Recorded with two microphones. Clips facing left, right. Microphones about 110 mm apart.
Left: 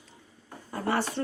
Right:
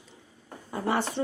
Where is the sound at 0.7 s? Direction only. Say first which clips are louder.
Right 1 dB; 15° right (ahead or behind).